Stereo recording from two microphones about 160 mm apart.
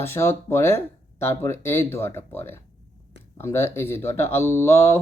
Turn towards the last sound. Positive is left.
turn(degrees=15)  # may be behind; listen again after turning